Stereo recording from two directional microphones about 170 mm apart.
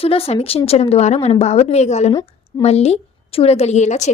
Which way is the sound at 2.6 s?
40° left (ahead or behind).